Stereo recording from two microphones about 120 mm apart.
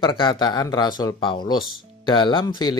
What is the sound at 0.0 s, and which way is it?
Speech, 40° left (ahead or behind).